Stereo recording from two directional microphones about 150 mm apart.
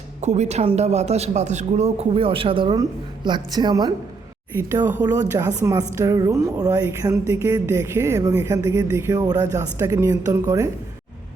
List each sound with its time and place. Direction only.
0.2 s a woman's voice: 50° right (ahead or behind); by 10.7 s 20° right (ahead or behind)